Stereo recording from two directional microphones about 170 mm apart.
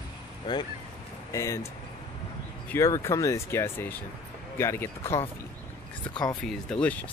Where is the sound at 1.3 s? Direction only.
20° left (ahead or behind).